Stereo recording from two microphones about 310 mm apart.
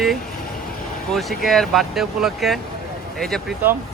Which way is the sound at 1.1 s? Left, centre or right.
Centre.